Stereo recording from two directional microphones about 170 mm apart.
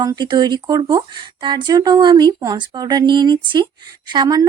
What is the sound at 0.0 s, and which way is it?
Speech, 25° right (ahead or behind).